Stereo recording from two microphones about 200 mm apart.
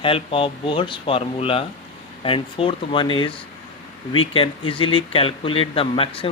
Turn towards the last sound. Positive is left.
turn(degrees=25)  # may be behind; listen again after turning